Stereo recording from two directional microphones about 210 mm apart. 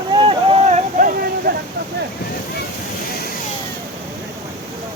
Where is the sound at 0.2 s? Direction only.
25° right (ahead or behind).